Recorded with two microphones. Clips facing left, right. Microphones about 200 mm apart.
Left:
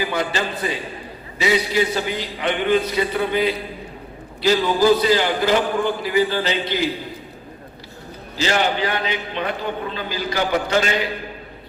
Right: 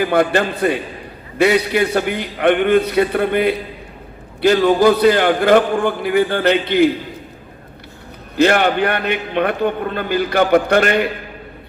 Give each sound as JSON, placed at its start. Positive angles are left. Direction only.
{"t": 0.0, "sound": "a man's voice", "side_deg": -55}
{"t": 8.4, "sound": "a man's voice", "side_deg": -60}